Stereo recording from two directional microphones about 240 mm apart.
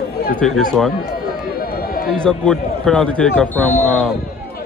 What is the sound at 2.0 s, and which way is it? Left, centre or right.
A man's voice, centre.